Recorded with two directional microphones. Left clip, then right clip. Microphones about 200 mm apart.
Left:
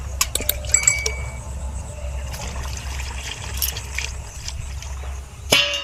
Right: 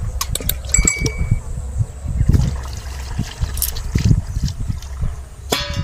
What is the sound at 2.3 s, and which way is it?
Water, centre (ahead or behind).